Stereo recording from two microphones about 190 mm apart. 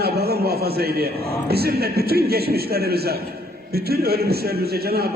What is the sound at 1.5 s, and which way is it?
A man's voice, 55° right (ahead or behind).